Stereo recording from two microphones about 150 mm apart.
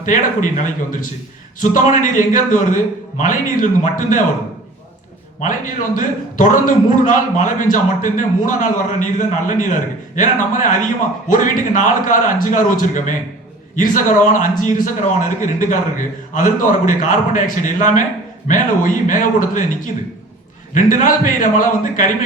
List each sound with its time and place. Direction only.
0.0 s a man's voice: 60° left (ahead or behind)
5.4 s a man's voice: 60° left (ahead or behind)